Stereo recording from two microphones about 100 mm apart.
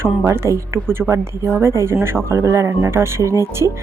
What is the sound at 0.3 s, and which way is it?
Speech, 30° right (ahead or behind).